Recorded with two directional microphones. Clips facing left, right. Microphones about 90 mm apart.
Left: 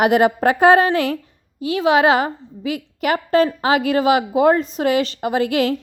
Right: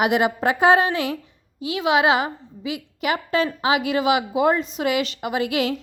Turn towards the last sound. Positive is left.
turn(degrees=40)  # may be behind; listen again after turning